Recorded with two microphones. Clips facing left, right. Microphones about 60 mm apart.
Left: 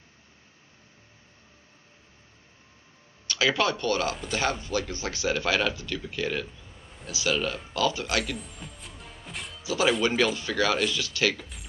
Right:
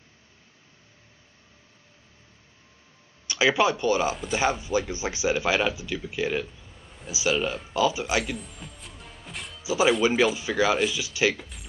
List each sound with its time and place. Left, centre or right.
3.3 s a man's voice: centre
6.5 s a sound: centre
7.1 s speech: centre
9.6 s a man's voice: centre
11.3 s speech: centre